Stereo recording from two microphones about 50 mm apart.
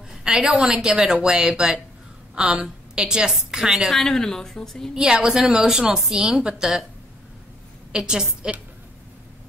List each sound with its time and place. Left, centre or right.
0.2 s a woman's voice: centre
3.9 s a woman's voice: centre
4.9 s a woman's voice: centre
7.9 s a woman's voice: centre